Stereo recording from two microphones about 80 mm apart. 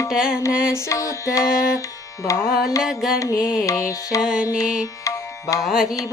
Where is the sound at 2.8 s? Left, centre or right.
Centre.